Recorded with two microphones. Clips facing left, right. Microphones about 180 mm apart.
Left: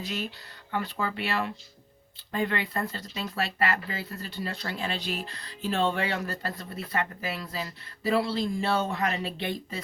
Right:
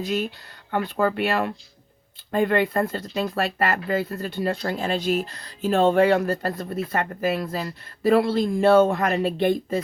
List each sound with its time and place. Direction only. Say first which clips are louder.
0.0 s speech: right 8 dB; 50° right (ahead or behind)